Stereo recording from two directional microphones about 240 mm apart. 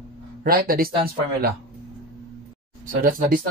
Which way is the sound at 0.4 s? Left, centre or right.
Right.